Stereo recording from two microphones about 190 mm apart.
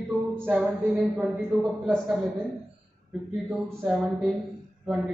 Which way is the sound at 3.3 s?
5° right (ahead or behind).